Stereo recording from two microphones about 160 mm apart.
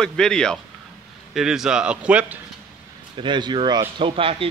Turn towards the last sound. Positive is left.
turn(degrees=-35)  # may be behind; listen again after turning